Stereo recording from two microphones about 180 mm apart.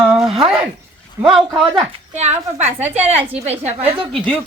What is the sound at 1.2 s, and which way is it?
Speech, centre (ahead or behind).